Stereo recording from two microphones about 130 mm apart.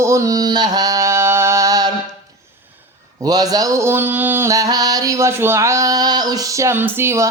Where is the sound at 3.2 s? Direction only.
30° right (ahead or behind).